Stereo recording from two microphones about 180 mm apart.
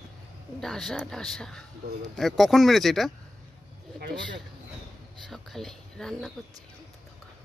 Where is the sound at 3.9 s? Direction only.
70° right (ahead or behind).